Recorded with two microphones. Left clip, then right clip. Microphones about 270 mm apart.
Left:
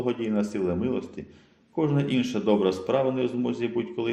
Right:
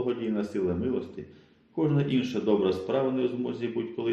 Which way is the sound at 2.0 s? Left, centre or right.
Left.